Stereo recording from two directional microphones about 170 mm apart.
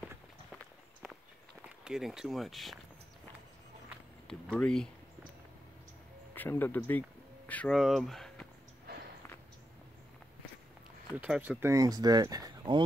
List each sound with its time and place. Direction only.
1.0 s walk: 10° right (ahead or behind)
1.9 s speech: 5° right (ahead or behind)
4.3 s speech: 5° left (ahead or behind)
6.3 s speech: 10° left (ahead or behind)
11.1 s speech: 5° right (ahead or behind); by 12.8 s 25° right (ahead or behind)